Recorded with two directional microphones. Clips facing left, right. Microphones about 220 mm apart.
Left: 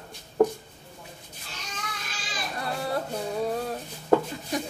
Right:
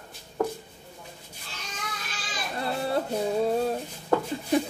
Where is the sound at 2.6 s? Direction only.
25° right (ahead or behind).